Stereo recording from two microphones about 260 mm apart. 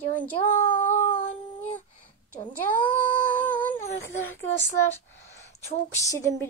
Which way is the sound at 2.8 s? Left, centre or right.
Centre.